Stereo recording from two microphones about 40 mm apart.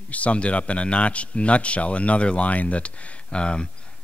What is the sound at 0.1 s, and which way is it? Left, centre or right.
A man's voice, left.